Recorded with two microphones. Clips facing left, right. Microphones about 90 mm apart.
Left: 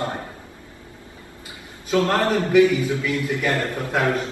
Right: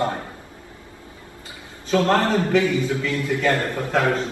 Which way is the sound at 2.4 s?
20° left (ahead or behind).